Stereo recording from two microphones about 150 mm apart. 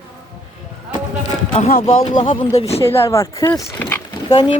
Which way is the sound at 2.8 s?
20° left (ahead or behind).